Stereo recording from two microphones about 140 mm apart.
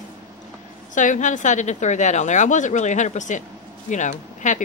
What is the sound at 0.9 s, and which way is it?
A woman's voice, 65° left (ahead or behind).